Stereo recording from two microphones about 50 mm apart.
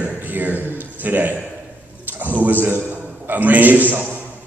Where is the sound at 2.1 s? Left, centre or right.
Right.